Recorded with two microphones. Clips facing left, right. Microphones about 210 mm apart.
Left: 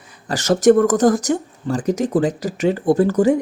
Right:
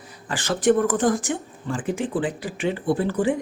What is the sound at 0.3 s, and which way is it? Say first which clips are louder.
Speech: left 7 dB; 40° left (ahead or behind).